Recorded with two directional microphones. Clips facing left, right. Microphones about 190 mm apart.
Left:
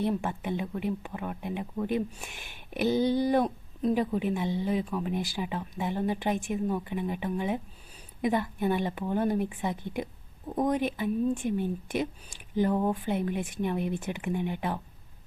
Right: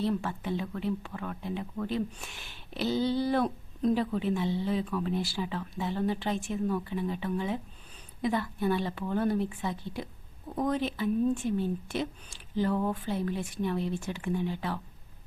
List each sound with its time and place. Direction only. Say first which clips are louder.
0.0 s a woman's voice: left 1 dB; 15° left (ahead or behind)